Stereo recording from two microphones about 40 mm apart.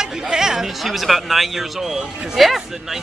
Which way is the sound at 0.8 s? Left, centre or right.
Centre.